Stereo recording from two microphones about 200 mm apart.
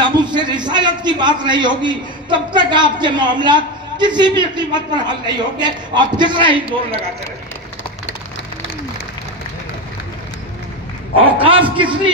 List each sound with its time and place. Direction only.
0.2 s a man's voice: 20° right (ahead or behind)
11.3 s a man's voice: 25° right (ahead or behind)